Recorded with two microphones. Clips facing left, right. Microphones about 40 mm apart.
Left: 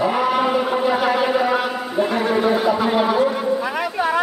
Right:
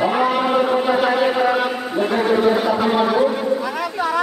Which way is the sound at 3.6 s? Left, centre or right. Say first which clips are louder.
Left 1 dB; left.